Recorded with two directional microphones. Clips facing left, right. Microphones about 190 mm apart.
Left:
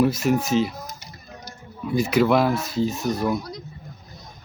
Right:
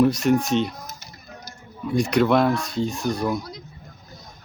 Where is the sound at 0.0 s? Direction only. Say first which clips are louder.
Right 2 dB; 5° left (ahead or behind).